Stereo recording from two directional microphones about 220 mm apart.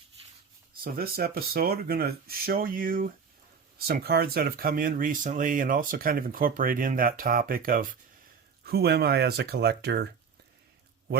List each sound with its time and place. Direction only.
0.9 s speech: 45° right (ahead or behind)